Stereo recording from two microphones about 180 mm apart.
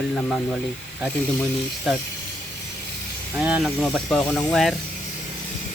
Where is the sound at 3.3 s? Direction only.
5° right (ahead or behind).